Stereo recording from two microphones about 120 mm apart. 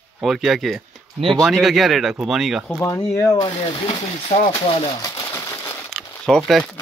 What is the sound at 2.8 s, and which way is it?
Speech, 25° left (ahead or behind).